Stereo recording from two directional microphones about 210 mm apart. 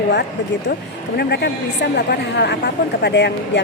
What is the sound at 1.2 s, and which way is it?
A woman's voice, 50° left (ahead or behind).